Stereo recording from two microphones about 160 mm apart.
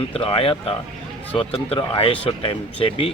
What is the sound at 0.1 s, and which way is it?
Speech, 35° left (ahead or behind).